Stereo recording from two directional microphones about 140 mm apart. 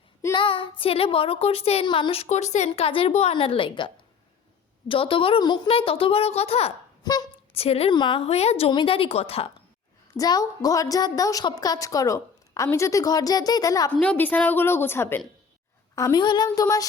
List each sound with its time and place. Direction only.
0.3 s a woman's voice: 35° left (ahead or behind)
7.0 s speech: 25° left (ahead or behind)
7.5 s a woman's voice: 45° left (ahead or behind)
7.9 s a woman's voice: 35° left (ahead or behind)
8.3 s a woman's voice: 50° left (ahead or behind)
10.2 s a woman's voice: 25° left (ahead or behind)
14.0 s a woman's voice: 10° left (ahead or behind)
16.0 s a woman's voice: 25° left (ahead or behind)